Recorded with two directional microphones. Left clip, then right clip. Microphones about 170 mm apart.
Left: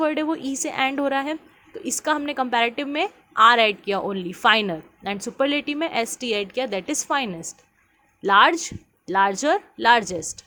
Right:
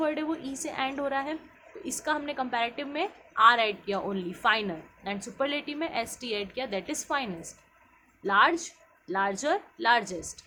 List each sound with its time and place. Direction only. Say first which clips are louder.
0.0 s a woman's voice: left 7 dB; 40° left (ahead or behind)